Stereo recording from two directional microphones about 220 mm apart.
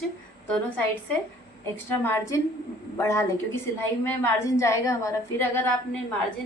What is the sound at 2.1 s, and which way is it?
A woman's voice, 10° left (ahead or behind).